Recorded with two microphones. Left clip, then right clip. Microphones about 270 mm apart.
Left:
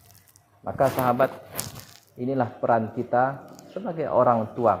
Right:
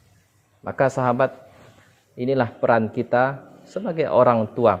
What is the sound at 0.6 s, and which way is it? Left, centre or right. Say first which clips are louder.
Speech: right 2 dB; right.